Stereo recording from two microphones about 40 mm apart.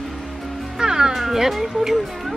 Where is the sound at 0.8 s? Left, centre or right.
Centre.